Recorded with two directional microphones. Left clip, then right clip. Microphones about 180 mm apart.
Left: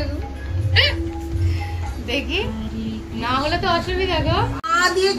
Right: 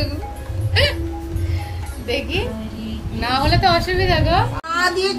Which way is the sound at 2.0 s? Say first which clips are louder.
Right 1 dB; 30° right (ahead or behind).